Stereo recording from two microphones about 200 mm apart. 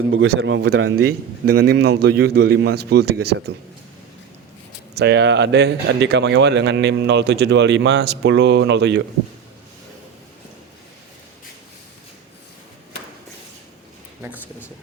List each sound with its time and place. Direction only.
0.1 s a man's voice: 65° right (ahead or behind)
4.9 s speech: 60° right (ahead or behind)
14.2 s a sound: 10° right (ahead or behind)